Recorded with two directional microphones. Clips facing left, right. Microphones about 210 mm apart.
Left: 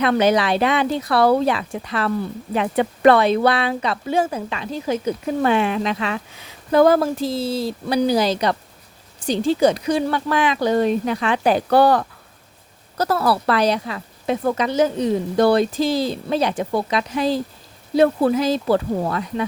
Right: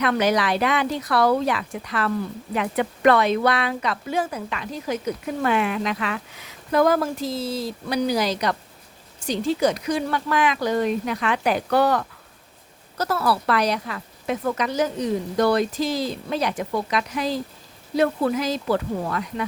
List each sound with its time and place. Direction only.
0.0 s speech: 25° left (ahead or behind)